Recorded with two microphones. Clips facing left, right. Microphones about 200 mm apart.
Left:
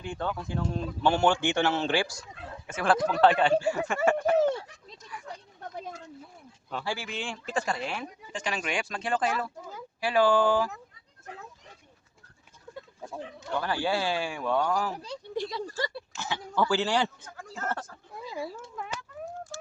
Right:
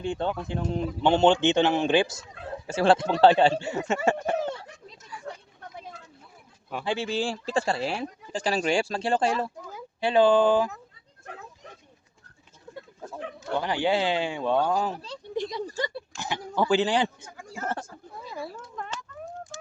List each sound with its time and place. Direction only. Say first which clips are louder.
0.0 s speech: right 5 dB; 25° right (ahead or behind)
6.7 s speech: right 3 dB; 10° right (ahead or behind)
6.9 s speech: right 8 dB; 30° right (ahead or behind)
13.5 s speech: right 4 dB; 15° right (ahead or behind)
18.8 s a sound: right 1 dB; 5° left (ahead or behind)